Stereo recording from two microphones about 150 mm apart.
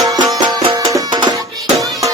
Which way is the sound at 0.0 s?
25° right (ahead or behind).